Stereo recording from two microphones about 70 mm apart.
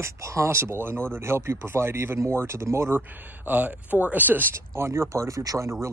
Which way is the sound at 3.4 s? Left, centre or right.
Right.